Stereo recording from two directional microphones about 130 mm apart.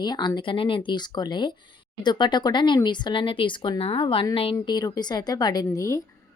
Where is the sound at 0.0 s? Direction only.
35° left (ahead or behind).